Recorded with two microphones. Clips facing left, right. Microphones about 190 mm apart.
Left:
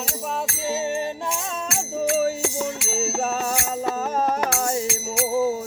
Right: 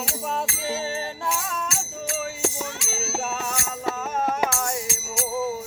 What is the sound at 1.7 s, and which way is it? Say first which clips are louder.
Music: left 8 dB; 60° left (ahead or behind).